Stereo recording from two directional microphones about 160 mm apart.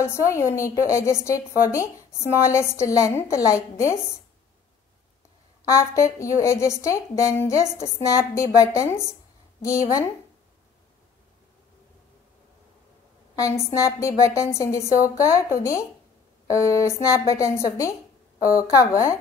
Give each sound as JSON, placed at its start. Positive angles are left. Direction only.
{"t": 0.0, "sound": "a woman's voice", "side_deg": 20}
{"t": 5.8, "sound": "a woman's voice", "side_deg": 20}
{"t": 13.8, "sound": "a woman's voice", "side_deg": 20}